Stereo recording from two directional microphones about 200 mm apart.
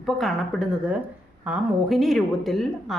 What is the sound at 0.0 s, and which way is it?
A woman's voice, centre (ahead or behind).